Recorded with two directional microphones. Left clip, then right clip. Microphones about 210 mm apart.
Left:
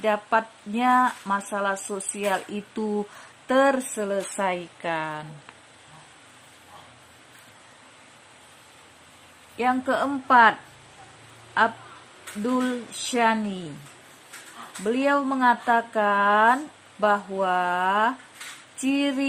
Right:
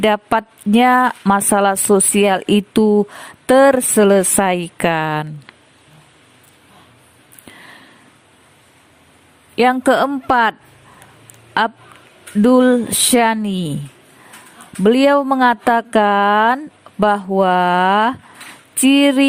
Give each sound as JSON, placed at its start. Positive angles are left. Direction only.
{"t": 0.0, "sound": "speech", "side_deg": -50}
{"t": 2.8, "sound": "speech", "side_deg": -30}
{"t": 3.4, "sound": "speech", "side_deg": -45}
{"t": 9.6, "sound": "speech", "side_deg": -45}
{"t": 12.4, "sound": "speech", "side_deg": -50}
{"t": 14.8, "sound": "speech", "side_deg": -50}